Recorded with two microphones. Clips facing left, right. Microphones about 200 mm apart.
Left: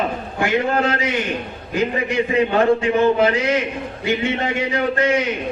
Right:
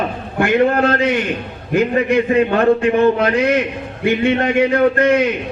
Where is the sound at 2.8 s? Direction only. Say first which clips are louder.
Right 2 dB; 60° right (ahead or behind).